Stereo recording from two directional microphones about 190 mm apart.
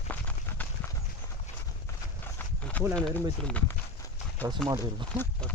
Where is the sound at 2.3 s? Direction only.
10° left (ahead or behind).